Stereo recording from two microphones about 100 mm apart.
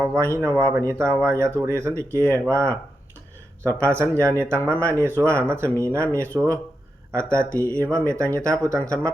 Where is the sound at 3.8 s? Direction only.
30° right (ahead or behind).